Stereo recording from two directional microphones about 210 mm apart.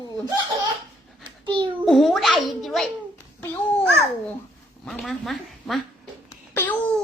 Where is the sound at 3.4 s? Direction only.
5° left (ahead or behind).